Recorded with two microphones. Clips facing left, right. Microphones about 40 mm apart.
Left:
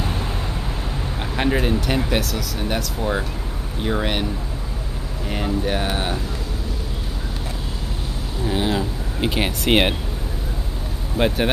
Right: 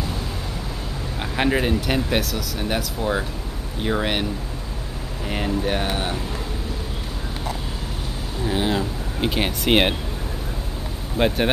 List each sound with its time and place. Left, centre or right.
1.2 s speech: centre
5.3 s speech: centre
5.9 s speech: centre
8.5 s speech: centre
11.1 s speech: centre